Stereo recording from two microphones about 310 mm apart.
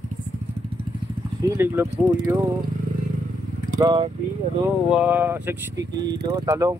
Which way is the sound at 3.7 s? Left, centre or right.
Centre.